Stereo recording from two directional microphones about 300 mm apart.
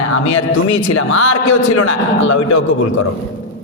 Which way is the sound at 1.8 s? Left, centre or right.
Left.